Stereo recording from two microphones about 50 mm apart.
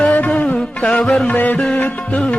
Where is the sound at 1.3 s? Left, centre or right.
Left.